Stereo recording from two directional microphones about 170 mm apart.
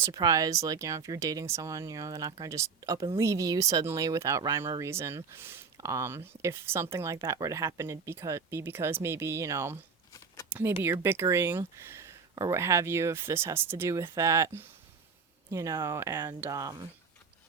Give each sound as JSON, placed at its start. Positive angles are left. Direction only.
{"t": 0.0, "sound": "speech", "side_deg": -20}